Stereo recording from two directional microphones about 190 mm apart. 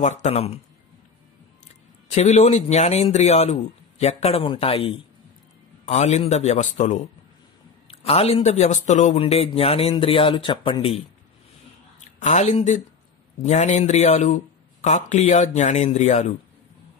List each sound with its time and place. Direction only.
0.0 s a man's voice: 35° left (ahead or behind)
2.0 s a man's voice: 35° left (ahead or behind)
12.2 s a man's voice: 40° left (ahead or behind)